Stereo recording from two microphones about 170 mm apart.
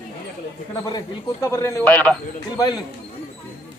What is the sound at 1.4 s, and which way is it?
Speech, 15° left (ahead or behind).